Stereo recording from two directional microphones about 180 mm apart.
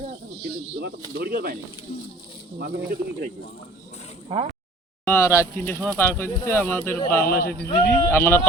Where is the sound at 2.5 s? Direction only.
50° right (ahead or behind).